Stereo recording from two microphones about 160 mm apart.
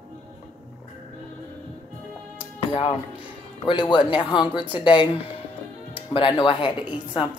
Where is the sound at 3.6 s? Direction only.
30° left (ahead or behind).